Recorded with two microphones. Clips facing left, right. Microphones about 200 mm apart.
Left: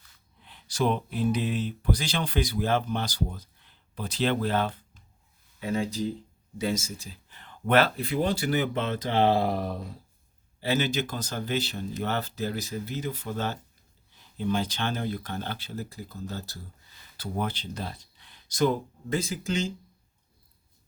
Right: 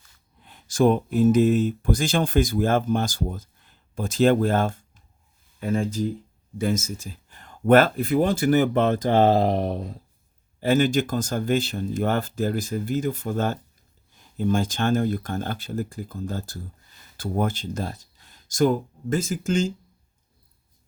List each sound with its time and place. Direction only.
0.4 s speech: 45° right (ahead or behind)
10.6 s speech: 50° right (ahead or behind)